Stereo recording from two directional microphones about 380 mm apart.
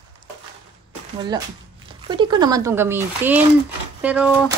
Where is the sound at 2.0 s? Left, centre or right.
Centre.